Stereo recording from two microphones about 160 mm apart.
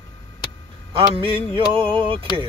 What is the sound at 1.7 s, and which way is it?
Yodeling, 35° right (ahead or behind).